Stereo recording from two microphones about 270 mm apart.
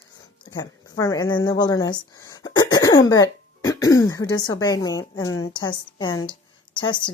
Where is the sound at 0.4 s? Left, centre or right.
Centre.